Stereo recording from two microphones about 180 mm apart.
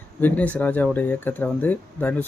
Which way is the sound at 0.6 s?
10° left (ahead or behind).